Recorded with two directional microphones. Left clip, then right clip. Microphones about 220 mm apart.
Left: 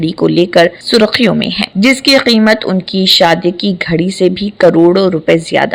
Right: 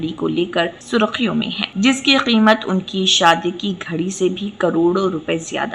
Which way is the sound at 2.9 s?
65° left (ahead or behind).